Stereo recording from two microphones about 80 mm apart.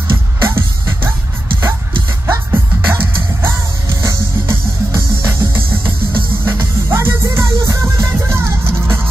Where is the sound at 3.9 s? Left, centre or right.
Right.